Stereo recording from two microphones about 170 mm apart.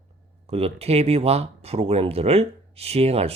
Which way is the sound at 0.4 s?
35° right (ahead or behind).